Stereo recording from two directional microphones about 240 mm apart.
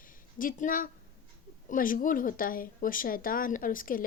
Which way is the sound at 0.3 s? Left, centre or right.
Left.